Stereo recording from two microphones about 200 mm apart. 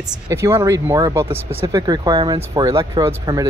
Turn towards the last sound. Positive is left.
turn(degrees=-15)  # may be behind; listen again after turning